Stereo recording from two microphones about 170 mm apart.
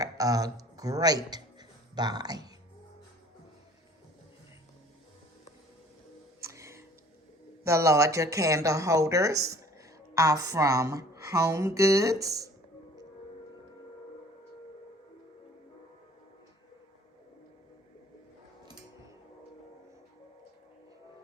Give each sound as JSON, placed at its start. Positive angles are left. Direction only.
{"t": 0.0, "sound": "speech", "side_deg": -20}
{"t": 6.4, "sound": "music", "side_deg": -15}
{"t": 7.6, "sound": "a woman's voice", "side_deg": -15}